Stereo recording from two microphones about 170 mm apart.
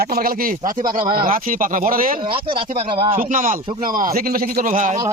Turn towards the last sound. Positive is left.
turn(degrees=-50)  # may be behind; listen again after turning